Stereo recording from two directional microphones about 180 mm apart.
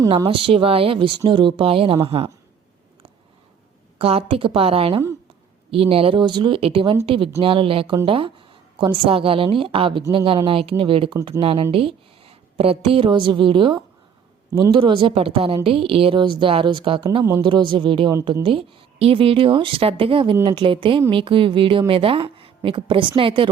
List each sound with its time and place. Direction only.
0.3 s a woman's voice: 30° right (ahead or behind)
3.9 s a woman's voice: 30° right (ahead or behind); by 18.4 s 15° right (ahead or behind)
18.4 s a woman's voice: 30° right (ahead or behind)